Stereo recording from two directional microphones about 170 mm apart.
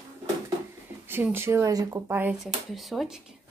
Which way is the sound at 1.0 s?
15° right (ahead or behind).